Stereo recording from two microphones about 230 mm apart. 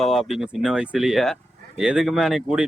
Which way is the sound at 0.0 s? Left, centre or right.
Centre.